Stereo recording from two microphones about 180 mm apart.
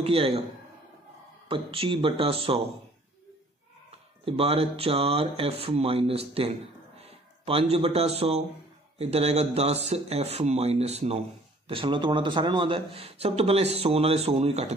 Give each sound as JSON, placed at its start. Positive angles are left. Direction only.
{"t": 0.0, "sound": "speech", "side_deg": -30}
{"t": 1.5, "sound": "speech", "side_deg": -30}
{"t": 4.2, "sound": "speech", "side_deg": -30}